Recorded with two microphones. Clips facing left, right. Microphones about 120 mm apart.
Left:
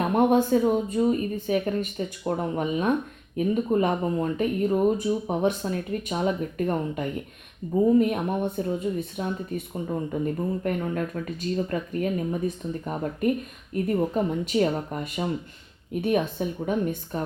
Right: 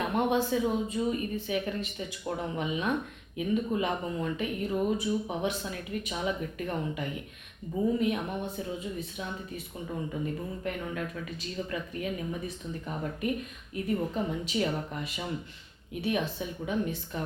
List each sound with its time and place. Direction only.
0.0 s speech: 45° left (ahead or behind)